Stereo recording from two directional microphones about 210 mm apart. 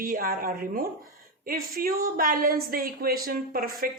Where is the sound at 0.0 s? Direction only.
45° right (ahead or behind).